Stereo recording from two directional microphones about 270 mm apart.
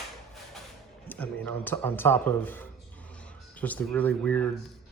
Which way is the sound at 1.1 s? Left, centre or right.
Centre.